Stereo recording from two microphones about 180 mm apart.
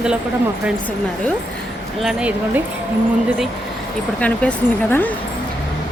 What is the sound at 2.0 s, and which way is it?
Speech, 5° right (ahead or behind).